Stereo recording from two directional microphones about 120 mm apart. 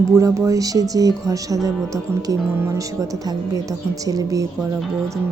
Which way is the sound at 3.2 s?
30° right (ahead or behind).